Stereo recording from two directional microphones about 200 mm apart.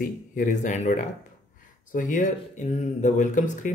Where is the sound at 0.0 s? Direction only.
40° left (ahead or behind).